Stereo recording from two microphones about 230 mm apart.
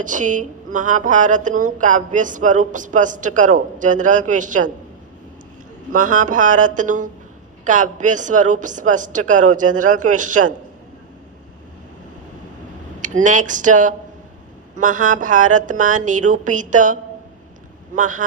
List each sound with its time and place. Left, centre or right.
0.0 s a woman's voice: right
5.9 s a woman's voice: right
13.0 s a woman's voice: right